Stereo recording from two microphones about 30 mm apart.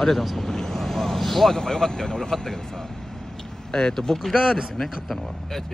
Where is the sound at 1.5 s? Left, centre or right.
Centre.